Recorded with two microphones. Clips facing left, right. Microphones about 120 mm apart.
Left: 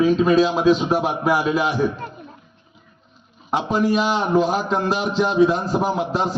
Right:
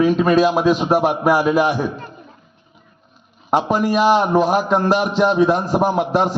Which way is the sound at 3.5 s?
50° right (ahead or behind).